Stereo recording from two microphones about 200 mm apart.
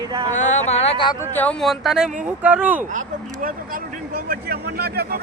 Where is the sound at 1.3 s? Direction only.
5° left (ahead or behind).